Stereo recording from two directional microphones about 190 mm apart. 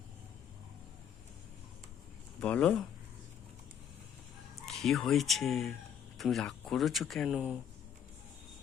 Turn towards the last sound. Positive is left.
turn(degrees=-5)  # may be behind; listen again after turning